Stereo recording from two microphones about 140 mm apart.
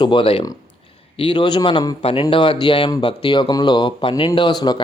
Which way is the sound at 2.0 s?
40° left (ahead or behind).